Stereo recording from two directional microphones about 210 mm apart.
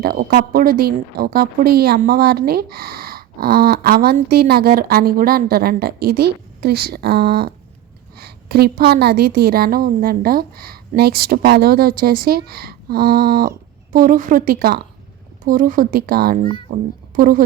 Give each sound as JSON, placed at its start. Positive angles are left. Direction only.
{"t": 0.0, "sound": "a woman's voice", "side_deg": -45}